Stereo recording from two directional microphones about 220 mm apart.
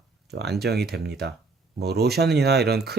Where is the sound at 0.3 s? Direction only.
50° right (ahead or behind).